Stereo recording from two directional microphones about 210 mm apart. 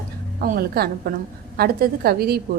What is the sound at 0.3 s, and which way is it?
Speech, 45° right (ahead or behind).